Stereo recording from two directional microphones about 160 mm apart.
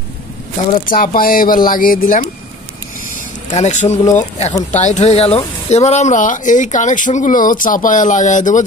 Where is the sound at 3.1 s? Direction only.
50° left (ahead or behind).